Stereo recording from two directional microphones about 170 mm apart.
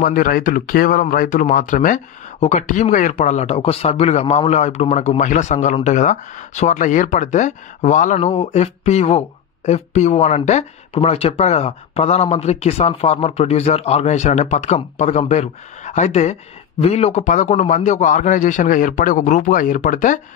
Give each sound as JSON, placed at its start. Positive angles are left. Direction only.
{"t": 0.0, "sound": "a man's voice", "side_deg": 55}